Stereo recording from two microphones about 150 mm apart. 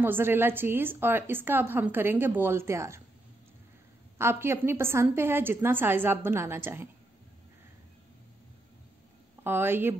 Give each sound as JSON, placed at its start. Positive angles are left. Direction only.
{"t": 0.0, "sound": "a woman's voice", "side_deg": -15}
{"t": 4.2, "sound": "a woman's voice", "side_deg": -15}
{"t": 9.4, "sound": "a woman's voice", "side_deg": -15}